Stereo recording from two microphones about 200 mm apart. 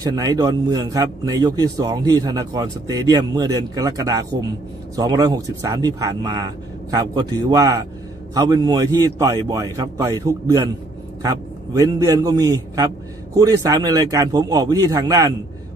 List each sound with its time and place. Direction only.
0.0 s a man's voice: 20° right (ahead or behind)